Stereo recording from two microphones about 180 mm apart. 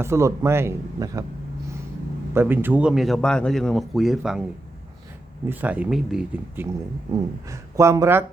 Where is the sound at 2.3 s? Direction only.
10° right (ahead or behind).